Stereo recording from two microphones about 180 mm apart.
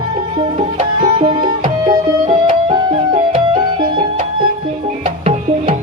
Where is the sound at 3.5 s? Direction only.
25° right (ahead or behind).